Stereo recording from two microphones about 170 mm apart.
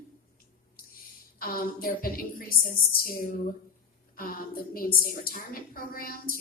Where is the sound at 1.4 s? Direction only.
60° left (ahead or behind).